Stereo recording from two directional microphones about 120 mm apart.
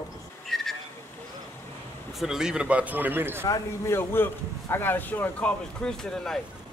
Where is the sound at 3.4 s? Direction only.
25° left (ahead or behind).